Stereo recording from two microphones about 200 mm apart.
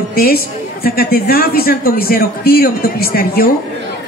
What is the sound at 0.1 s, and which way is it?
A woman's voice, 50° left (ahead or behind).